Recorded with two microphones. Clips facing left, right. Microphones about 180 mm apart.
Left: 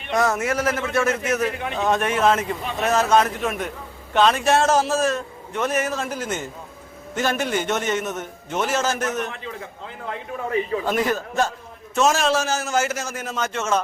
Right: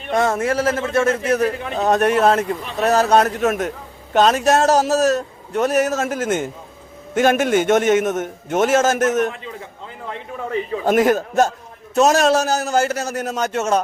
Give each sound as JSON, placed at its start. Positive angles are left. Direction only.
{"t": 0.1, "sound": "a man's voice", "side_deg": -30}
{"t": 10.8, "sound": "a man's voice", "side_deg": -45}